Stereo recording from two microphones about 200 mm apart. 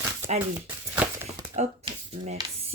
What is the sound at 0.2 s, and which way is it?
Speech, 15° right (ahead or behind).